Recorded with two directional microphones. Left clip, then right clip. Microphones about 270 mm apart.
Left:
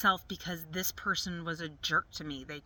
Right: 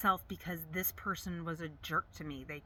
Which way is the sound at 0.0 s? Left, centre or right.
Centre.